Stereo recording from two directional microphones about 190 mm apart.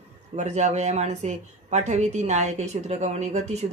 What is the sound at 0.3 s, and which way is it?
A woman's voice, 35° right (ahead or behind).